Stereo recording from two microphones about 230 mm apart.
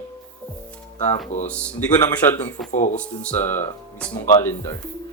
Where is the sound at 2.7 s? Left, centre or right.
Left.